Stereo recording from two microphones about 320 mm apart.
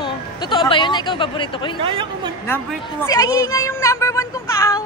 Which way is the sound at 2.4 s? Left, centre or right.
Centre.